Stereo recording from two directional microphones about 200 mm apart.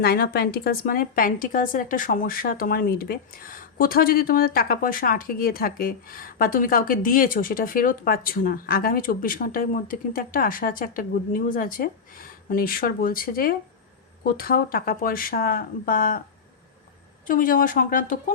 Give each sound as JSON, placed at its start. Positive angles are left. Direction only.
{"t": 0.0, "sound": "a woman's voice", "side_deg": 50}
{"t": 17.2, "sound": "a woman's voice", "side_deg": 45}